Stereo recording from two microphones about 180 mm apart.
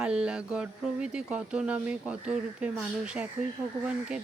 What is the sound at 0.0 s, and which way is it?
Speech, 5° right (ahead or behind).